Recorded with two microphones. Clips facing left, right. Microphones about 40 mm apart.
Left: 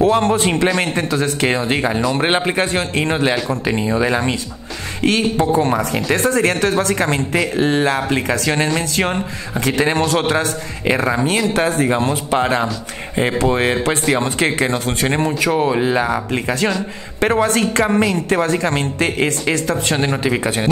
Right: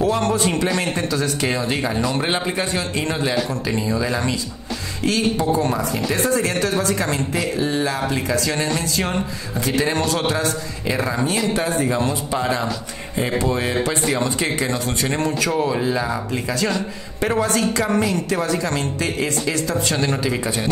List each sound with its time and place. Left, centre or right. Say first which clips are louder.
0.0 s a man's voice: left 4 dB; left
15.1 s a man's voice: left 3 dB; left